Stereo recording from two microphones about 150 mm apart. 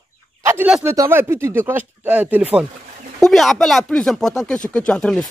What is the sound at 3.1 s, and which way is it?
Speech, centre (ahead or behind).